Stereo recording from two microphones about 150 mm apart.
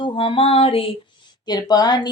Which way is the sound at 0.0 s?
35° left (ahead or behind).